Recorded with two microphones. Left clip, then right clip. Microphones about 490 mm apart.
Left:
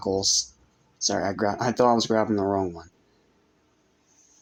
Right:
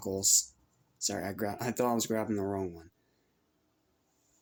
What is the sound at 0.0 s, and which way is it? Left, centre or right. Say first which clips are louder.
Speech: left 7 dB; right.